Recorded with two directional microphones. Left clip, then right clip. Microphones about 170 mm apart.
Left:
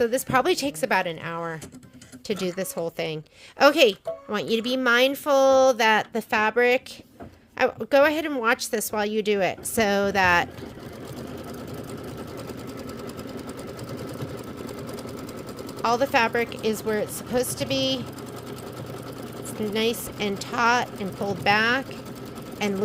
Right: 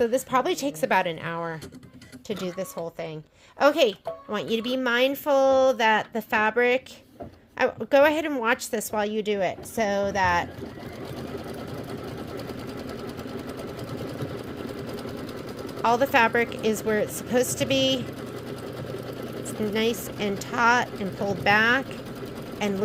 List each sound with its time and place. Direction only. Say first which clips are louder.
0.0 s speech: left 1 dB; 15° left (ahead or behind)
2.2 s speech: left 3 dB; 25° left (ahead or behind)
2.7 s a woman's voice: left 4 dB; 40° left (ahead or behind)
15.8 s a woman's voice: right 1 dB; 5° left (ahead or behind)
19.7 s a woman's voice: left 1 dB; 5° left (ahead or behind)